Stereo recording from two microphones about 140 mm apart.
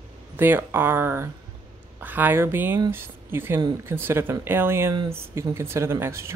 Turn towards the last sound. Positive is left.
turn(degrees=-20)  # may be behind; listen again after turning